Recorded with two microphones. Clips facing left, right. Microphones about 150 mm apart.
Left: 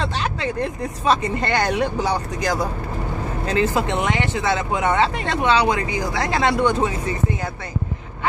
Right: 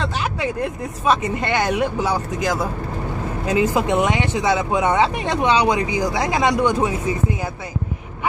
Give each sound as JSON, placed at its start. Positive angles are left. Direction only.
{"t": 0.4, "sound": "speech", "side_deg": -5}